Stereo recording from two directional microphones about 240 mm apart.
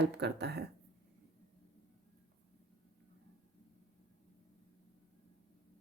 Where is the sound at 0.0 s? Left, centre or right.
Right.